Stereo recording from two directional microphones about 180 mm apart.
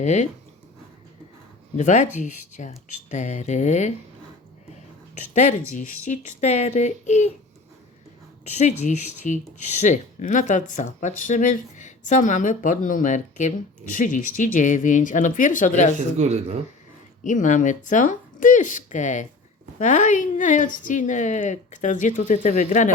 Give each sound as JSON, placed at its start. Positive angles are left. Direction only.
{"t": 0.0, "sound": "speech", "side_deg": 40}
{"t": 1.7, "sound": "speech", "side_deg": 40}
{"t": 5.1, "sound": "speech", "side_deg": 40}
{"t": 8.5, "sound": "speech", "side_deg": 40}
{"t": 16.0, "sound": "speech", "side_deg": -40}
{"t": 17.2, "sound": "speech", "side_deg": 45}